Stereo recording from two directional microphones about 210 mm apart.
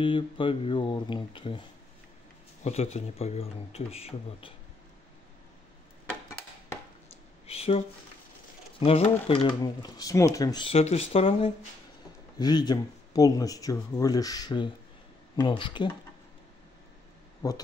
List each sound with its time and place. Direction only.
0.0 s speech: 25° left (ahead or behind)
7.4 s speech: 30° left (ahead or behind)
17.4 s speech: 15° left (ahead or behind)